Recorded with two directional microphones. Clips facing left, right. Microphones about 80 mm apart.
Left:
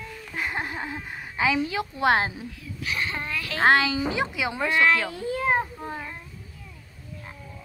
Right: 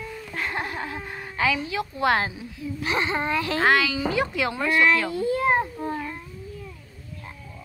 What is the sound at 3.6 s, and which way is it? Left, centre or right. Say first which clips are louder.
Speech: left 3 dB; left.